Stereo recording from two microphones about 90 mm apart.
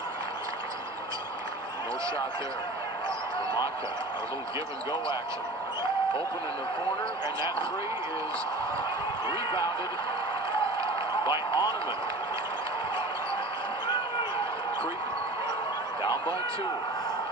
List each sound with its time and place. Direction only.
11.2 s a man's voice: 65° left (ahead or behind)